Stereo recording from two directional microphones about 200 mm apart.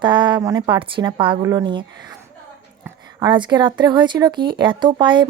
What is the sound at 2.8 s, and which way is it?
Speech, 20° right (ahead or behind).